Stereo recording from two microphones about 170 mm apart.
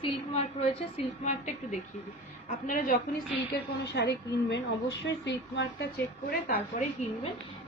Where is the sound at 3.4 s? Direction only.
85° left; by 6.5 s 70° left (ahead or behind).